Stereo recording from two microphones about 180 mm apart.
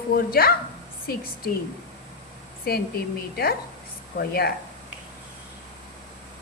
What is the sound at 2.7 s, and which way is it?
A woman's voice, 60° left (ahead or behind).